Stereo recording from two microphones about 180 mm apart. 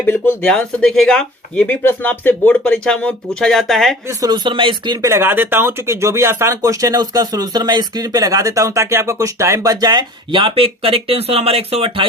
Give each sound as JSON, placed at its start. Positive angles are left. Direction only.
{"t": 0.0, "sound": "speech", "side_deg": 10}
{"t": 4.2, "sound": "speech", "side_deg": -25}
{"t": 5.0, "sound": "speech", "side_deg": -15}